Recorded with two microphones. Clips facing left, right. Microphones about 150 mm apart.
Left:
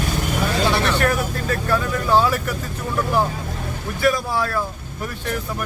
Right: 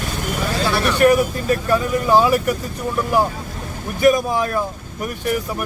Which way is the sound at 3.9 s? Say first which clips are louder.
Right 5 dB; 20° right (ahead or behind).